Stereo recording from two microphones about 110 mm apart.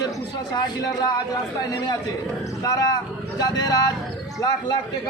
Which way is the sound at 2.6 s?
35° left (ahead or behind).